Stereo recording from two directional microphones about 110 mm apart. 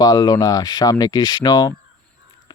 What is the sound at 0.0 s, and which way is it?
Speech, 35° left (ahead or behind).